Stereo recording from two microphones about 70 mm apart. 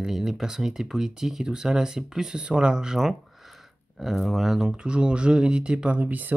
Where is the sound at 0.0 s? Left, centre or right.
Centre.